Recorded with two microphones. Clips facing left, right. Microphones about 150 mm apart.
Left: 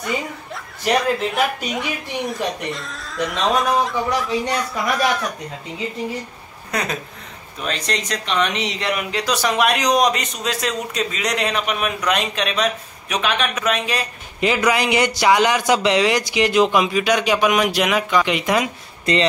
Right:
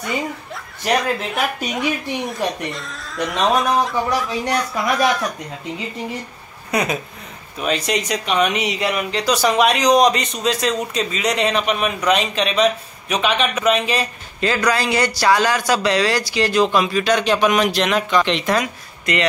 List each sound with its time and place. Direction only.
1.3 s speech: centre (ahead or behind)
6.7 s speech: 10° right (ahead or behind)
14.4 s speech: 15° left (ahead or behind)
19.1 s speech: 30° left (ahead or behind)